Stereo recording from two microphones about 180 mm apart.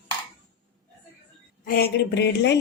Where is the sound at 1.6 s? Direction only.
55° left (ahead or behind).